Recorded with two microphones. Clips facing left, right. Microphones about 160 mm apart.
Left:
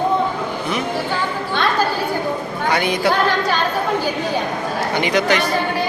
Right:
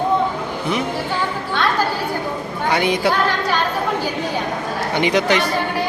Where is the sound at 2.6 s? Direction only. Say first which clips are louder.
Right 1 dB; 25° right (ahead or behind).